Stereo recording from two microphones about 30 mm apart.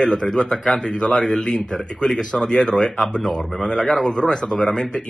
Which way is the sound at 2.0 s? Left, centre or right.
Left.